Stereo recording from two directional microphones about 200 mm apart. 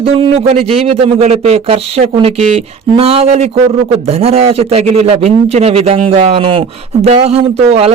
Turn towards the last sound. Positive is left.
turn(degrees=-30)  # may be behind; listen again after turning